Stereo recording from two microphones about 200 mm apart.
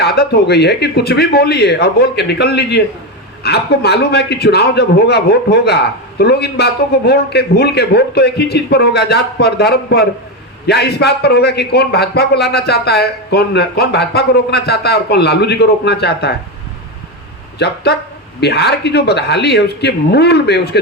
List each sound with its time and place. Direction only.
0.0 s a man's voice: 55° left (ahead or behind)
17.6 s a man's voice: 55° left (ahead or behind)